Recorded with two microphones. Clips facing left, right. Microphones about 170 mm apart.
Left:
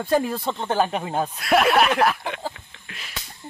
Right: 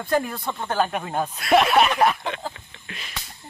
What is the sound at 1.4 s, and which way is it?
Speech, centre (ahead or behind).